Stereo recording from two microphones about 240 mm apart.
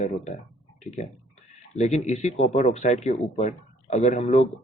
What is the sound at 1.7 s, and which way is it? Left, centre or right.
Speech, left.